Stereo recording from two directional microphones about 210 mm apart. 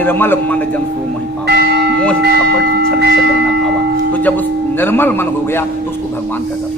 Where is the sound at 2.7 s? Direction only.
50° right (ahead or behind).